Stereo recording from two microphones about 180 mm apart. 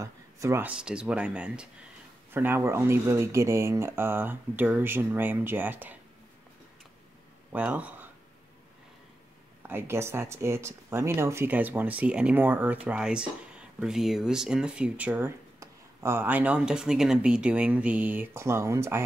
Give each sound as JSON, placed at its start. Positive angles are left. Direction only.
{"t": 0.0, "sound": "speech", "side_deg": -15}
{"t": 7.5, "sound": "speech", "side_deg": -10}
{"t": 9.6, "sound": "speech", "side_deg": -10}